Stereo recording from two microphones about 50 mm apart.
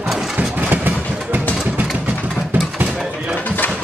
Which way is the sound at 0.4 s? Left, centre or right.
Right.